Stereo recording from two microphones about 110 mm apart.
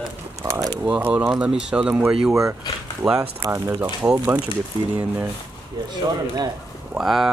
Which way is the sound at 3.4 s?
25° right (ahead or behind).